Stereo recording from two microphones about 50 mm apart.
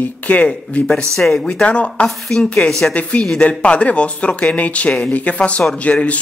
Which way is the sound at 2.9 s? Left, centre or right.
Left.